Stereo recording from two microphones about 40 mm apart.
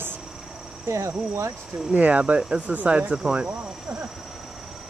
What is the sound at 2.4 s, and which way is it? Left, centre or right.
Speech, right.